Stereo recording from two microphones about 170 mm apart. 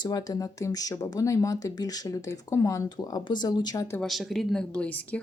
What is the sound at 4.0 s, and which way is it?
Speech, centre (ahead or behind).